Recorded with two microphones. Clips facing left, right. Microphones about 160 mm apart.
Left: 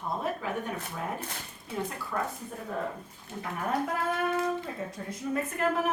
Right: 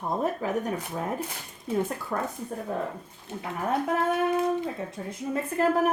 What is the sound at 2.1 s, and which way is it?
Speech, 55° right (ahead or behind).